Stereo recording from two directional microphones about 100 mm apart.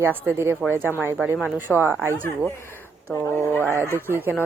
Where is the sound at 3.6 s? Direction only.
25° right (ahead or behind).